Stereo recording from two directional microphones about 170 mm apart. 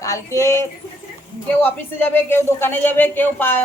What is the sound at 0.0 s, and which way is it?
Speech, 20° left (ahead or behind).